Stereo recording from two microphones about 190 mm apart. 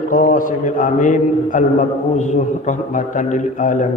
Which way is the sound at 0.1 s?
45° left (ahead or behind).